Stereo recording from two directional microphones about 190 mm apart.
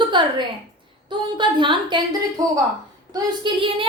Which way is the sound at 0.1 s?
25° right (ahead or behind).